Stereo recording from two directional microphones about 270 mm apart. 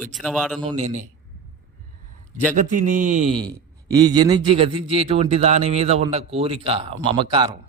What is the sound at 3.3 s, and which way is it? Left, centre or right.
Speech, centre.